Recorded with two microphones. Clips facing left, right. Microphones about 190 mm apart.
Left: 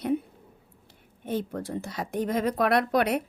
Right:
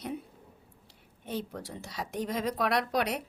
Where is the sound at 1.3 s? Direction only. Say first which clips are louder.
Left 7 dB; 50° left (ahead or behind).